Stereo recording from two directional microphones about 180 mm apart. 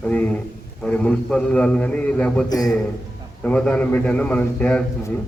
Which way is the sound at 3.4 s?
5° left (ahead or behind).